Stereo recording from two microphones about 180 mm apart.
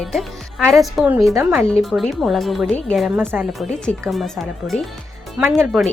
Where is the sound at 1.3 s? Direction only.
15° right (ahead or behind).